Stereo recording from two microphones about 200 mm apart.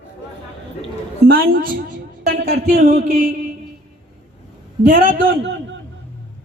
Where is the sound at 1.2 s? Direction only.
50° right (ahead or behind).